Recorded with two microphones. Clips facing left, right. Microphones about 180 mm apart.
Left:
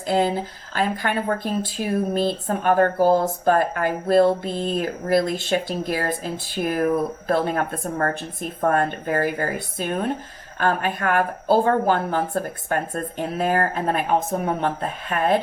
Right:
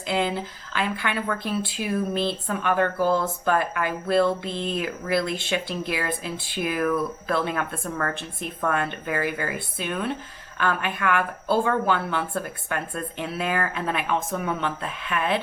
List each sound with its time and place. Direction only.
0.1 s speech: 40° left (ahead or behind)